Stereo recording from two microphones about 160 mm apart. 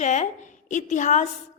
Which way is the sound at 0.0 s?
50° left (ahead or behind).